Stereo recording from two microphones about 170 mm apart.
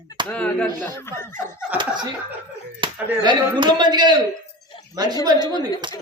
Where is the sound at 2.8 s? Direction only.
30° right (ahead or behind).